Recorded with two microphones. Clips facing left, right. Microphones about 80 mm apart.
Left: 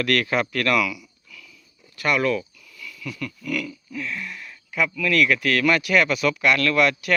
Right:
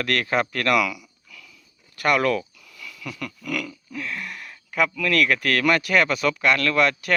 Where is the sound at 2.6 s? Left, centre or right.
Right.